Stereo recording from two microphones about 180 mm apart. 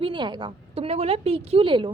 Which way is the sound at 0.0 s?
25° right (ahead or behind).